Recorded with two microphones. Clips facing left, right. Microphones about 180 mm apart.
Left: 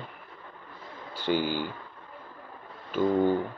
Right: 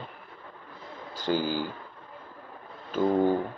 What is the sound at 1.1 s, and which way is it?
Speech, 40° right (ahead or behind).